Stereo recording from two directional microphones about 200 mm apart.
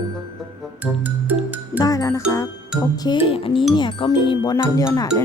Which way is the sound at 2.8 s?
25° left (ahead or behind).